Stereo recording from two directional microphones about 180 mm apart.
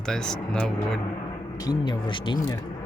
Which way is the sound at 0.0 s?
5° left (ahead or behind).